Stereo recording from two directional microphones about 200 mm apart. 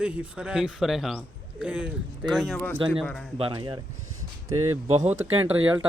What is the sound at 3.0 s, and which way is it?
Speech, centre (ahead or behind).